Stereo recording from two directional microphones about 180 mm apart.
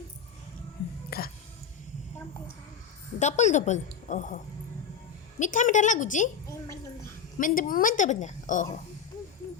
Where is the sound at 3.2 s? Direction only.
40° left (ahead or behind).